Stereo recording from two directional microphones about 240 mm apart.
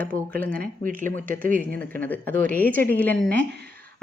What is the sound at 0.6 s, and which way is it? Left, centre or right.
Speech, right.